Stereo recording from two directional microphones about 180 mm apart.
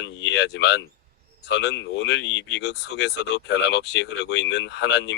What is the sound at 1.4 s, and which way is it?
Speech, 75° left (ahead or behind).